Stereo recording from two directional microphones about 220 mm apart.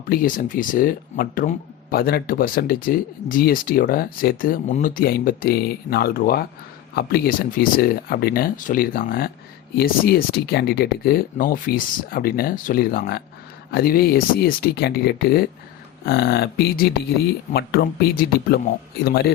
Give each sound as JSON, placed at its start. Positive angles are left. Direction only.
{"t": 0.1, "sound": "speech", "side_deg": 40}